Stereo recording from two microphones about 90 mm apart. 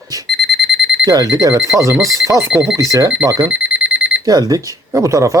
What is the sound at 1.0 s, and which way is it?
Speech, 40° right (ahead or behind).